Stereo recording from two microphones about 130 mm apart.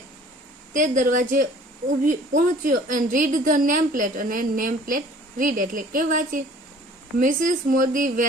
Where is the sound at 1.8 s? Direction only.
75° right (ahead or behind); by 8.2 s 90° right.